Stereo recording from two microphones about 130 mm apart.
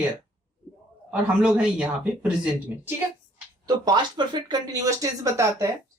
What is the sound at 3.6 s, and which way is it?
Speech, 30° right (ahead or behind).